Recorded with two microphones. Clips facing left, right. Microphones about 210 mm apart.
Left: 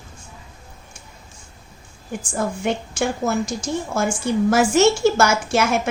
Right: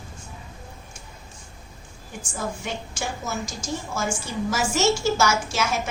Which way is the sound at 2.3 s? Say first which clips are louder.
Left 8 dB; 60° left (ahead or behind).